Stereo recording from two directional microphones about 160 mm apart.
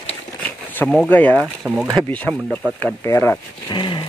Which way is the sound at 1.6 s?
20° right (ahead or behind).